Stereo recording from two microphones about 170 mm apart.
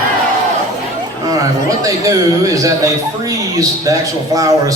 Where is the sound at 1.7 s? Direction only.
20° right (ahead or behind).